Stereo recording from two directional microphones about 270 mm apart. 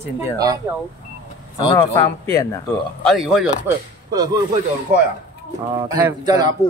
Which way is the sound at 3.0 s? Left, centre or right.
Centre.